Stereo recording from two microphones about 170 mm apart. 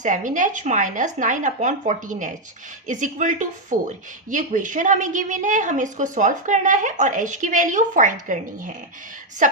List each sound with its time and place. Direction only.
0.0 s a woman's voice: 50° right (ahead or behind)